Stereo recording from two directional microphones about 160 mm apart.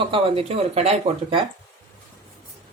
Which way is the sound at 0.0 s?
35° right (ahead or behind).